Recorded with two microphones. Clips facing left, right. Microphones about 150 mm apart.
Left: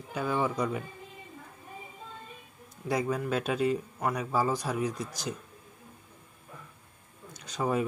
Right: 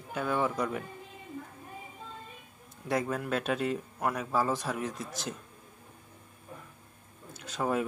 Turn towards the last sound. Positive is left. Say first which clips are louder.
# left 1 dB
turn(degrees=0)  # may be behind; listen again after turning